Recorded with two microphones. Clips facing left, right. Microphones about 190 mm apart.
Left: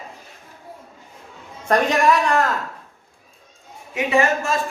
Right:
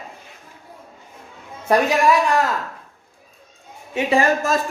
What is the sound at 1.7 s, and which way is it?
Speech, 10° right (ahead or behind).